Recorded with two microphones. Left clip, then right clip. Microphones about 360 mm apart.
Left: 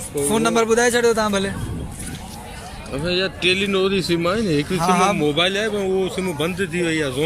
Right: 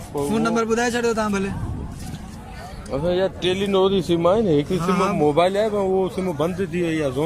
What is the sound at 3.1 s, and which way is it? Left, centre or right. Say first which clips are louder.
Speech: left 2 dB; centre.